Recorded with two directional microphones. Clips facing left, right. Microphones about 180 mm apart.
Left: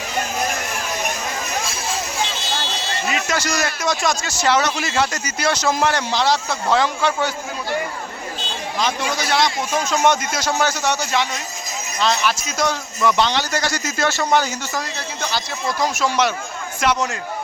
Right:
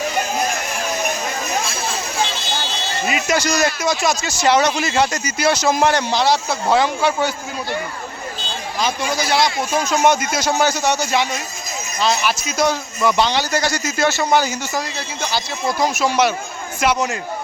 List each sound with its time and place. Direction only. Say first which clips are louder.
3.1 s speech: right 4 dB; 15° right (ahead or behind)
3.8 s a man's voice: right 2 dB; 5° right (ahead or behind)
8.8 s a man's voice: right 2 dB; 5° right (ahead or behind)